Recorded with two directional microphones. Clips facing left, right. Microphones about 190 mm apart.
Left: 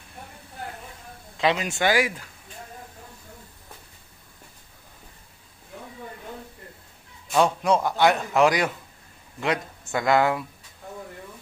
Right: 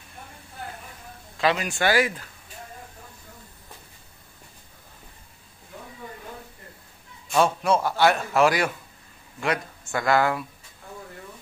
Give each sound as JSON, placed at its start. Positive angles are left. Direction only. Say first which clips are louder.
{"t": 1.4, "sound": "speech", "louder": "even", "side_deg": 20}
{"t": 7.4, "sound": "a man's voice", "louder": "left 1 dB", "side_deg": 15}